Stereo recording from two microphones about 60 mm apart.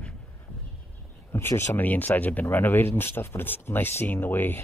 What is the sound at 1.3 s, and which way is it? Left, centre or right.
Speech, left.